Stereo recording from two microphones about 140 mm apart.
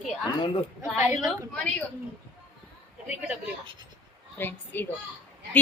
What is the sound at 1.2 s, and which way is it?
Speech, 10° left (ahead or behind).